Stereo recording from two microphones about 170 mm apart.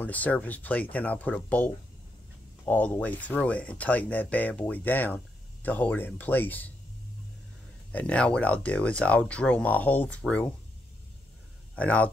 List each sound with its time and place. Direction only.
0.0 s speech: 10° left (ahead or behind)
7.9 s speech: 10° left (ahead or behind)
11.7 s speech: 10° left (ahead or behind)